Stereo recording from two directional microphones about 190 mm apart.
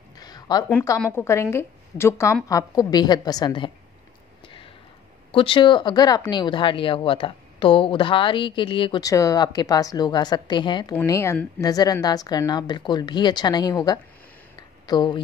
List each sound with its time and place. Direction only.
0.2 s a sound: 20° left (ahead or behind)
1.1 s a woman's voice: 15° left (ahead or behind)
5.3 s speech: 25° left (ahead or behind)